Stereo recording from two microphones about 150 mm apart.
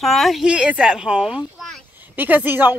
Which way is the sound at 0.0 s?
Centre (ahead or behind).